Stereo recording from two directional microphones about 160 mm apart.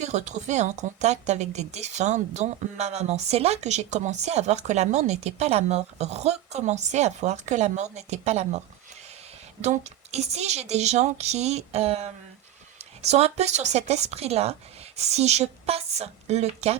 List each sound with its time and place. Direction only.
0.0 s a woman's voice: 45° right (ahead or behind)